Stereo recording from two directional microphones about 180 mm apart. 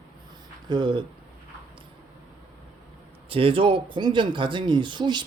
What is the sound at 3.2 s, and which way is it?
Speech, 30° right (ahead or behind).